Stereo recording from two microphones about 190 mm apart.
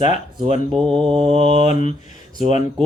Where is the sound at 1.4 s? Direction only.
40° left (ahead or behind).